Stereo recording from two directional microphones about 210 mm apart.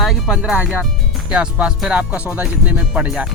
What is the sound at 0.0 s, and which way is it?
Speech, centre (ahead or behind).